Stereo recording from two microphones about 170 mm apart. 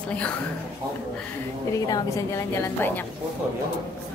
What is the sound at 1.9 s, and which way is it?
A woman's voice, 20° left (ahead or behind).